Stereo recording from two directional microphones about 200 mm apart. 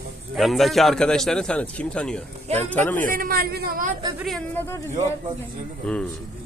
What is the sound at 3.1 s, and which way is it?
Speech, 45° right (ahead or behind).